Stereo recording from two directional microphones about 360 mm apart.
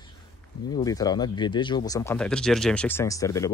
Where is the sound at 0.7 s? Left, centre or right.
Centre.